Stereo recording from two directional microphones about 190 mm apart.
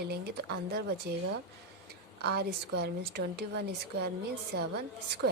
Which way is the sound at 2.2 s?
60° right (ahead or behind).